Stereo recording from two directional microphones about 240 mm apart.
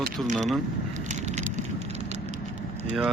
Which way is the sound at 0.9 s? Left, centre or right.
Right.